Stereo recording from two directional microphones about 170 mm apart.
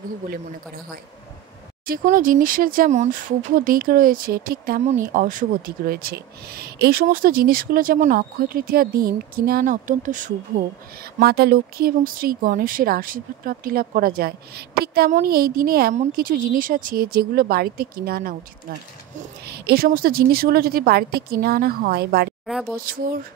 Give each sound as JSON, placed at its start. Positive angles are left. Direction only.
{"t": 1.9, "sound": "speech", "side_deg": -50}
{"t": 11.1, "sound": "speech", "side_deg": -65}
{"t": 19.4, "sound": "speech", "side_deg": -70}
{"t": 22.8, "sound": "speech", "side_deg": -55}